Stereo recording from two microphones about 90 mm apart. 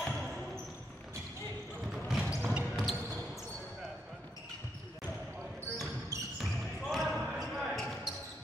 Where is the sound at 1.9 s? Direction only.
5° right (ahead or behind).